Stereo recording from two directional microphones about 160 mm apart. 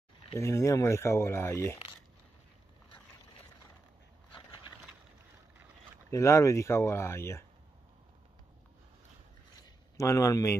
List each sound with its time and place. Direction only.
0.3 s speech: 20° left (ahead or behind)
6.0 s speech: 20° left (ahead or behind)
9.6 s a sound: 20° left (ahead or behind)